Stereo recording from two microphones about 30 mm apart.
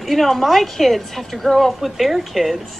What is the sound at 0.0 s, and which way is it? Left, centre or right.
A woman's voice, centre.